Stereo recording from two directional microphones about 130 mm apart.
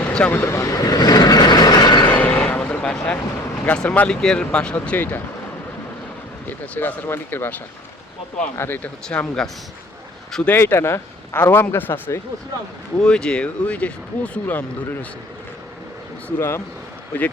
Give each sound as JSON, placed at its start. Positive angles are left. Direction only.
{"t": 0.0, "sound": "vehicle", "side_deg": 5}
{"t": 0.3, "sound": "vehicle", "side_deg": 20}
{"t": 2.0, "sound": "a sound", "side_deg": 10}
{"t": 3.7, "sound": "speech", "side_deg": 10}
{"t": 6.5, "sound": "speech", "side_deg": 15}
{"t": 9.0, "sound": "speech", "side_deg": 5}
{"t": 13.0, "sound": "speech", "side_deg": 5}
{"t": 16.4, "sound": "speech", "side_deg": 20}